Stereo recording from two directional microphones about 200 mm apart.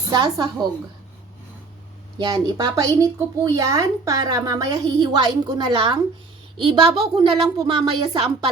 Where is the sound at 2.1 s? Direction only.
20° right (ahead or behind).